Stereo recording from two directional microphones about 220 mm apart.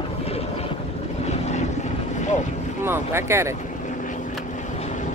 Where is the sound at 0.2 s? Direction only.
25° left (ahead or behind).